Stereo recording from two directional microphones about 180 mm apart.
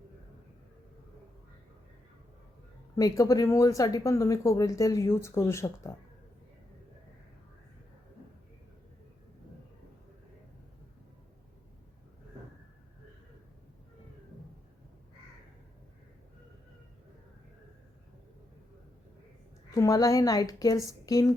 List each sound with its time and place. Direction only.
2.9 s speech: 20° left (ahead or behind)
19.7 s a woman's voice: 20° left (ahead or behind)